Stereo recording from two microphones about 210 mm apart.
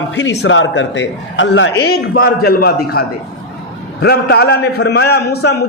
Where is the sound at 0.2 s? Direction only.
60° left (ahead or behind).